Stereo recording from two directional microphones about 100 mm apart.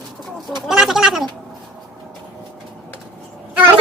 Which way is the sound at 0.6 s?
5° right (ahead or behind).